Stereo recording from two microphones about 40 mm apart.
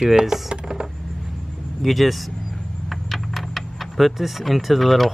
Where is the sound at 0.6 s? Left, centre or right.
Right.